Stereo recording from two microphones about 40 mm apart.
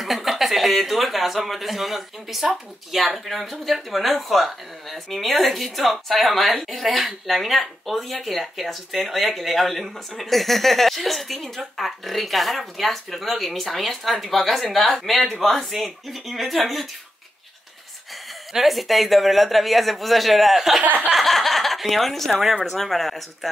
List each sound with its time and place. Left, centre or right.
0.0 s speech: centre
18.5 s speech: centre
20.8 s a sound: right
21.2 s speech: centre